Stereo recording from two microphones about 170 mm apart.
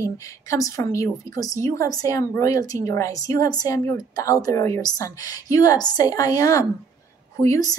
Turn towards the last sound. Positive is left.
turn(degrees=20)  # may be behind; listen again after turning